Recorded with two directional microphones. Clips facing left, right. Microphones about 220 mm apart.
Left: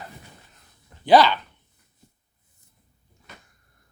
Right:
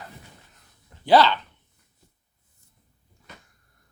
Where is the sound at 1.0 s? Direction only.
15° left (ahead or behind).